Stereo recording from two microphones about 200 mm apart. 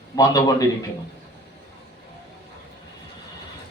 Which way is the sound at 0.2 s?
20° left (ahead or behind).